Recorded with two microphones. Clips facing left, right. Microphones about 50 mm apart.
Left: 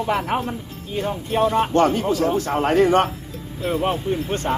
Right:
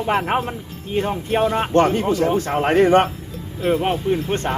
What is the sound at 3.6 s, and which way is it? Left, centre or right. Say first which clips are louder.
Speech: right 3 dB; centre.